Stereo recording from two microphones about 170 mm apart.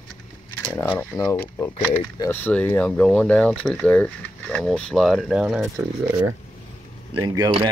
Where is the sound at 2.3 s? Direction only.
10° left (ahead or behind); by 5.7 s 5° right (ahead or behind).